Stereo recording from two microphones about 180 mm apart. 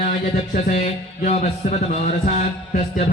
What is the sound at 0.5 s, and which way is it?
Speech, 40° left (ahead or behind).